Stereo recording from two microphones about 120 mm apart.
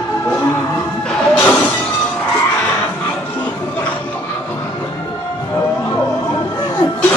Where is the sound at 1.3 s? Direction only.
15° left (ahead or behind).